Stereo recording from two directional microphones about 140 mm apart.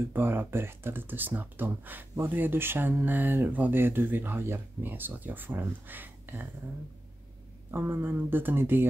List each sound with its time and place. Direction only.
0.1 s speech: 15° right (ahead or behind)
7.7 s speech: 15° right (ahead or behind)